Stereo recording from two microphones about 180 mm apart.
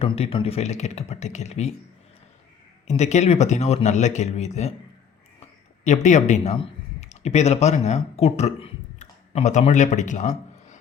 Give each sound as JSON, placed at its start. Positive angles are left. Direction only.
{"t": 0.0, "sound": "speech", "side_deg": 35}
{"t": 2.8, "sound": "speech", "side_deg": 40}
{"t": 5.8, "sound": "a man's voice", "side_deg": 40}